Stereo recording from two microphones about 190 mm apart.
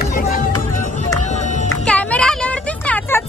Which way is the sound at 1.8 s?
5° left (ahead or behind).